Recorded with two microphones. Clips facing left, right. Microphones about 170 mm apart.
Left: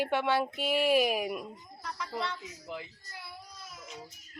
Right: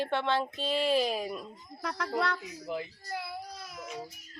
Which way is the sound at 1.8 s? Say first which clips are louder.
Right 5 dB; 75° right (ahead or behind).